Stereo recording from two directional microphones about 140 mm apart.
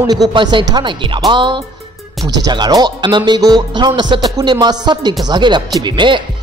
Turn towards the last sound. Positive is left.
turn(degrees=-35)  # may be behind; listen again after turning